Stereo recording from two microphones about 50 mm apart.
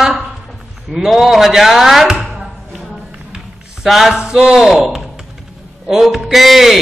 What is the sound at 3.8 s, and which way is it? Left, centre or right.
Music, centre.